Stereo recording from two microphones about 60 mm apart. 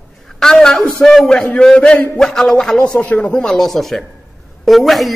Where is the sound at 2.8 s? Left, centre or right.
Left.